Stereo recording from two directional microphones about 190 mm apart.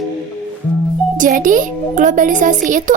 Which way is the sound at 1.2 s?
45° right (ahead or behind).